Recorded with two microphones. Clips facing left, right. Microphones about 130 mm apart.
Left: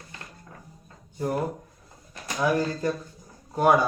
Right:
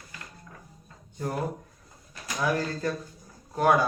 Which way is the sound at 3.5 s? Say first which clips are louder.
Left 2 dB; 15° left (ahead or behind).